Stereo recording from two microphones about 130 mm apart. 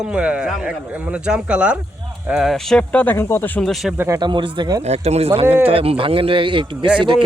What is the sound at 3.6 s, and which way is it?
Speech, centre (ahead or behind).